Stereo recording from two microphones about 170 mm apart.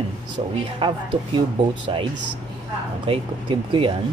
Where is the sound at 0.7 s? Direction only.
30° right (ahead or behind).